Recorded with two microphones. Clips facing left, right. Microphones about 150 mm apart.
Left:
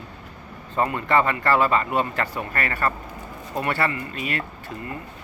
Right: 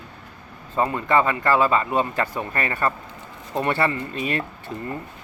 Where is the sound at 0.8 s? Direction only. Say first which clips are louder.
Right 1 dB; 15° right (ahead or behind).